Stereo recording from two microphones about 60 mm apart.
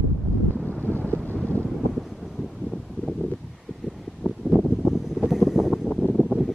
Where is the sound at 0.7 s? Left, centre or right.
Left.